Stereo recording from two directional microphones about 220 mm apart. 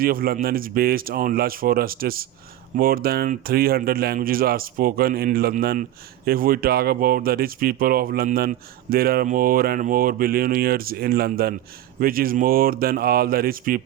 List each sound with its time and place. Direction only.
0.0 s speech: 40° right (ahead or behind)